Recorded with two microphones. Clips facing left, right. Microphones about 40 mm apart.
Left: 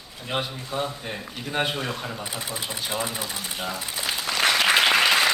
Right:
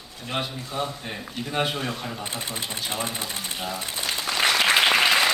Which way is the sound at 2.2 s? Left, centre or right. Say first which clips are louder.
Even; right.